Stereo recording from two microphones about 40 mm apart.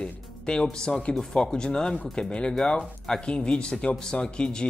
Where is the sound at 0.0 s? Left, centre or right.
Left.